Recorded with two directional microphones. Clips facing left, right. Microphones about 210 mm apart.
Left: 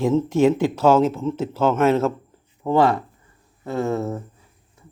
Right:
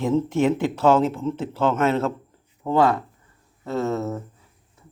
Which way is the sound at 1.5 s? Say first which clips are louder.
Left 3 dB; 25° left (ahead or behind).